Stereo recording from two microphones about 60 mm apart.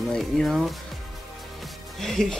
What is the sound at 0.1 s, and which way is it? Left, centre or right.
Speech, centre.